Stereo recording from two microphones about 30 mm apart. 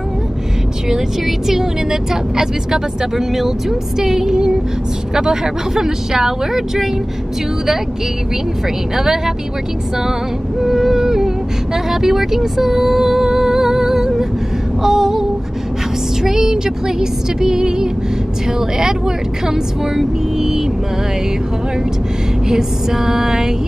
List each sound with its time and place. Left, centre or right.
0.8 s speech: centre
8.9 s speech: centre
10.6 s speech: centre
14.8 s female singing: centre
16.2 s music: centre
18.6 s speech: right
22.5 s speech: centre